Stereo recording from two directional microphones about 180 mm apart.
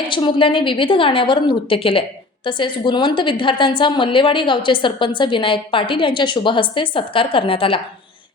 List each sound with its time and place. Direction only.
0.1 s a woman's voice: 25° left (ahead or behind)